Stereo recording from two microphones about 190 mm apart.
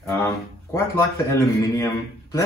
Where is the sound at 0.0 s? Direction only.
15° left (ahead or behind).